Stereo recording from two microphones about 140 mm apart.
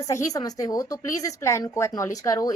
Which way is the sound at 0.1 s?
25° left (ahead or behind).